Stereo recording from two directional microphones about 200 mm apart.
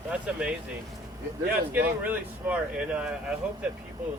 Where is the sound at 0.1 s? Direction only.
5° right (ahead or behind).